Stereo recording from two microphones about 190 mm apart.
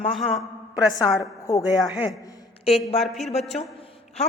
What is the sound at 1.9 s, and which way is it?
A woman's voice, centre (ahead or behind).